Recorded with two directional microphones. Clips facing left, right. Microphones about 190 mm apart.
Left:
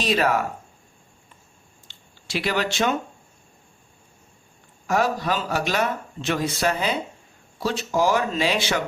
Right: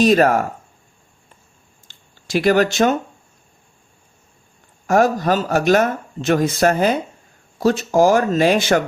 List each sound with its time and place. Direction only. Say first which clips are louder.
0.0 s speech: right 8 dB; 45° right (ahead or behind)
1.9 s a sound: right 8 dB; 45° right (ahead or behind)
4.9 s speech: right 7 dB; 45° right (ahead or behind)